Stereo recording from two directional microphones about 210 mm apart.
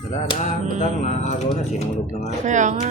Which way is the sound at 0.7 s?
30° left (ahead or behind).